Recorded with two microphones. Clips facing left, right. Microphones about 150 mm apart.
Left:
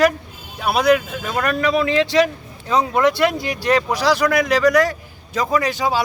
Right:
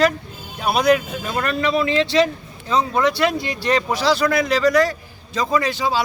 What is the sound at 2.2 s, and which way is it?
Speech, 15° left (ahead or behind).